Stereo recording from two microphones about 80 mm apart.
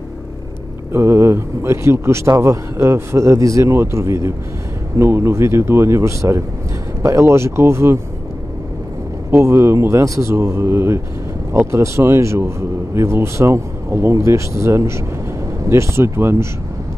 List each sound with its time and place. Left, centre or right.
0.9 s speech: right
9.3 s speech: right